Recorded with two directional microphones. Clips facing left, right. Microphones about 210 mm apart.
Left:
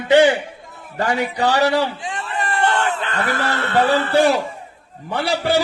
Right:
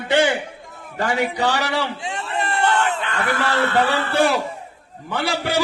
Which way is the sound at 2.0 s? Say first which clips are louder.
Even; 25° right (ahead or behind).